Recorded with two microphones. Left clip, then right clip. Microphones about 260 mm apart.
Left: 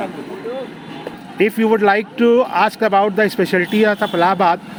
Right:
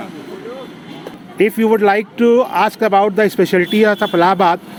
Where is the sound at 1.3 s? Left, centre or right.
Centre.